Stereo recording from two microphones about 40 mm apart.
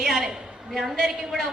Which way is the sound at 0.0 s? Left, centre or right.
Centre.